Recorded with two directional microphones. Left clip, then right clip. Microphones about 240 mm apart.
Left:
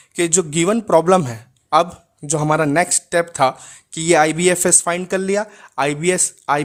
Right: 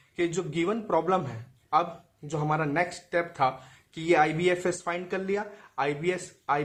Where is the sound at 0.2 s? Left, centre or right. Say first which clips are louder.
Left 10 dB; left.